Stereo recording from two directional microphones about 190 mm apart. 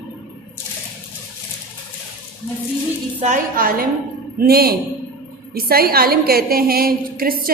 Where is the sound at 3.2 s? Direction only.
45° right (ahead or behind).